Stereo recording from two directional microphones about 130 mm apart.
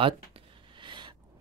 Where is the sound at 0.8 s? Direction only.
35° right (ahead or behind).